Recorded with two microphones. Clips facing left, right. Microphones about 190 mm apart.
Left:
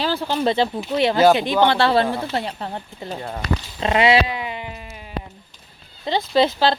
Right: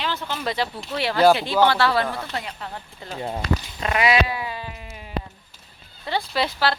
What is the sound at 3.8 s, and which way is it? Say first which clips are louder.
Cat: left 5 dB; 25° left (ahead or behind).